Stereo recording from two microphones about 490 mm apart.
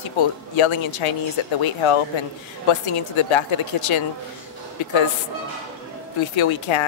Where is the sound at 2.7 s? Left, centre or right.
Left.